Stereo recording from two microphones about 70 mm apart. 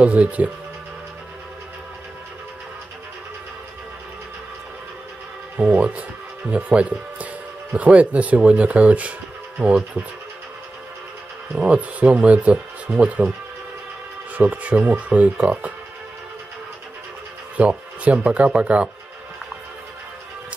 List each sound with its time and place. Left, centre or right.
0.0 s speech: centre
5.6 s speech: centre
11.5 s speech: centre
14.3 s speech: right
17.6 s speech: centre